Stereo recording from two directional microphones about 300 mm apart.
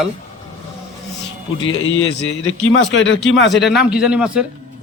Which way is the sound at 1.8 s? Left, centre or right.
Left.